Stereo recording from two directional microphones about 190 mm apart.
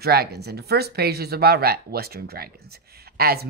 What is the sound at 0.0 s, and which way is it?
Speech, 55° right (ahead or behind).